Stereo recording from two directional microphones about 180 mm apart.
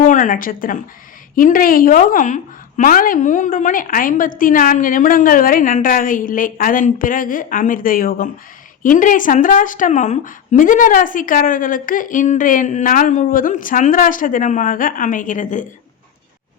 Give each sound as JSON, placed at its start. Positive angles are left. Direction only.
{"t": 0.0, "sound": "a woman's voice", "side_deg": 45}